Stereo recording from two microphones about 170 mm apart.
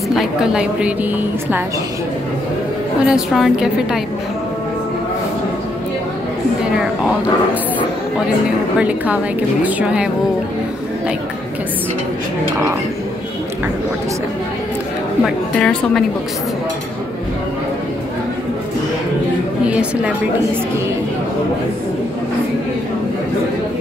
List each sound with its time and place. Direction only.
0.1 s a woman's voice: 5° right (ahead or behind)
3.1 s a woman's voice: centre (ahead or behind)
8.7 s a woman's voice: 10° right (ahead or behind)
15.2 s a woman's voice: 5° left (ahead or behind)
19.6 s a woman's voice: 5° right (ahead or behind)